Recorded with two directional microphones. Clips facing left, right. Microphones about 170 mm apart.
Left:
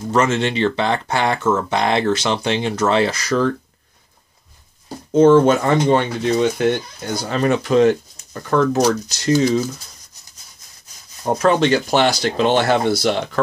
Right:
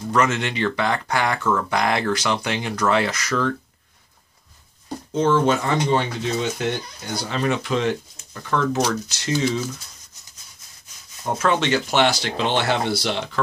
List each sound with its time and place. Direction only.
0.1 s speech: 30° left (ahead or behind)
5.1 s speech: 50° left (ahead or behind)
7.2 s speech: 45° left (ahead or behind)
11.2 s speech: 35° left (ahead or behind)